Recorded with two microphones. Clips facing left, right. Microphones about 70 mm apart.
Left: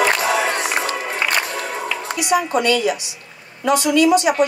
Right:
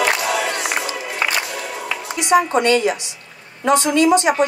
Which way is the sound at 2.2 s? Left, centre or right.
Right.